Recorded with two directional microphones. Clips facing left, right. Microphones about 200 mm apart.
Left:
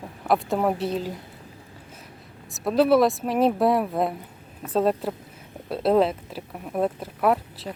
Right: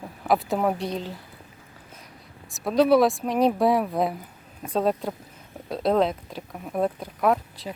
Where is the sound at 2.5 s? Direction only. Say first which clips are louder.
Even; centre (ahead or behind).